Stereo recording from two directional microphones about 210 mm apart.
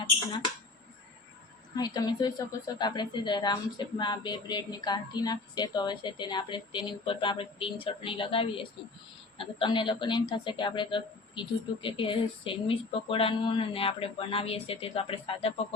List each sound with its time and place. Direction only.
0.0 s speech: 20° left (ahead or behind)
1.7 s speech: 20° left (ahead or behind)